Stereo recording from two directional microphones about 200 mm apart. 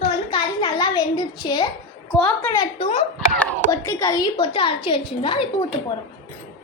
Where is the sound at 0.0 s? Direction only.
25° left (ahead or behind).